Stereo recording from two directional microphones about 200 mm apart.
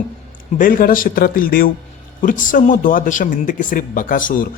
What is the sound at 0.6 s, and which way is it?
A man's voice, 45° left (ahead or behind).